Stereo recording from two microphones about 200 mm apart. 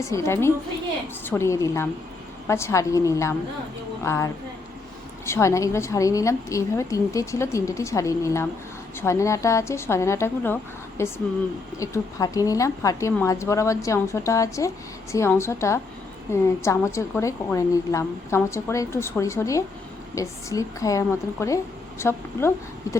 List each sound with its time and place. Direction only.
0.0 s a woman's voice: 15° left (ahead or behind)